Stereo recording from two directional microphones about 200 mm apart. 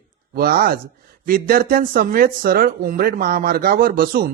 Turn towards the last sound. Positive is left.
turn(degrees=-45)  # may be behind; listen again after turning